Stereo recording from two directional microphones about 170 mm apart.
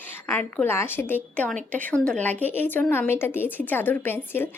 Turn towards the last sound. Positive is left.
turn(degrees=10)  # may be behind; listen again after turning